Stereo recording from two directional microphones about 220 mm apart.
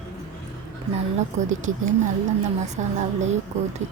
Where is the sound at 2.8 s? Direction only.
30° right (ahead or behind).